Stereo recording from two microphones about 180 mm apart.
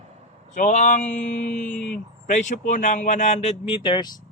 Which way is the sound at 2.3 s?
45° left (ahead or behind).